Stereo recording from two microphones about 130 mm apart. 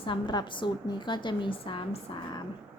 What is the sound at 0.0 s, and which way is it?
A woman's voice, 35° left (ahead or behind).